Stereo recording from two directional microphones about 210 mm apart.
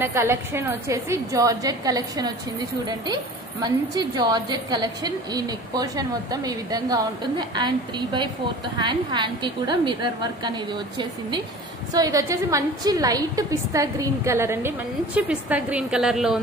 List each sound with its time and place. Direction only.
0.0 s a woman's voice: 10° right (ahead or behind)
3.6 s a woman's voice: 20° right (ahead or behind); by 16.3 s centre (ahead or behind)